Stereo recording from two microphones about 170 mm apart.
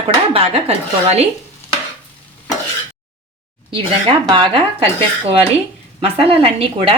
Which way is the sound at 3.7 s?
30° right (ahead or behind).